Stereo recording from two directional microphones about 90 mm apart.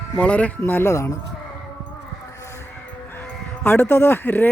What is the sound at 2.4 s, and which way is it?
Music, 30° left (ahead or behind).